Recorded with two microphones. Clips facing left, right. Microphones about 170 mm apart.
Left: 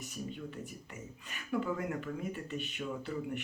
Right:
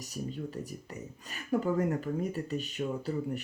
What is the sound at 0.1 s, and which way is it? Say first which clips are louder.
Speech: right 7 dB; 35° right (ahead or behind).